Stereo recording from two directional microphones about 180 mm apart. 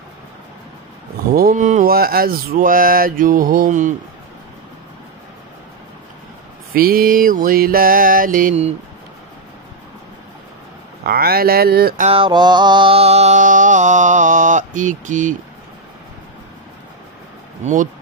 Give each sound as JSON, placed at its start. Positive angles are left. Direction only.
{"t": 1.3, "sound": "mantra", "side_deg": -50}
{"t": 6.7, "sound": "mantra", "side_deg": -55}
{"t": 11.1, "sound": "speech", "side_deg": -55}
{"t": 12.0, "sound": "mantra", "side_deg": -30}